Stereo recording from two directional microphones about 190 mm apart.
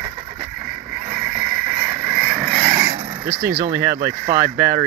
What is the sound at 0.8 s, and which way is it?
Vehicle, 5° right (ahead or behind).